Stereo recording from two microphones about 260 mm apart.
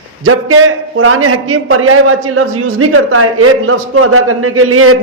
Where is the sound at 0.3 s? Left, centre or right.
Right.